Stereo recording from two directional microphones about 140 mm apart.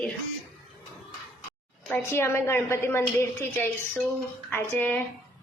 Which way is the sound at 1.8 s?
15° left (ahead or behind).